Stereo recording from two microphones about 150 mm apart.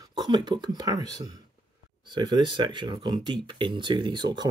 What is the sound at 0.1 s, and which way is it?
Speech, 30° right (ahead or behind).